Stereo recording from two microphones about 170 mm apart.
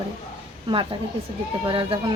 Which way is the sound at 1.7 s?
30° right (ahead or behind).